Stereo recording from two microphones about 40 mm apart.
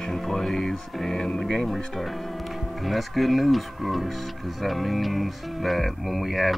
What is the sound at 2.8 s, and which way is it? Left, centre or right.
Speech, centre.